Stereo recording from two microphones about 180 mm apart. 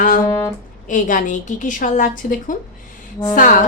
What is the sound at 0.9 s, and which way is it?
A woman's voice, 45° left (ahead or behind).